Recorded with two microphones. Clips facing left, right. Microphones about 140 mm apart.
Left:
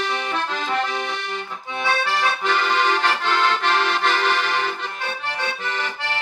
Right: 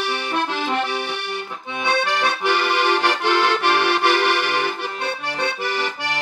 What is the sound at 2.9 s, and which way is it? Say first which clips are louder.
Accordion: right 3 dB; 65° right (ahead or behind).